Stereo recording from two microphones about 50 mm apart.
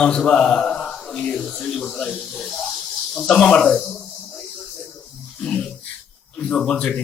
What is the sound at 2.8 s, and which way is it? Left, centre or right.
Speech, centre.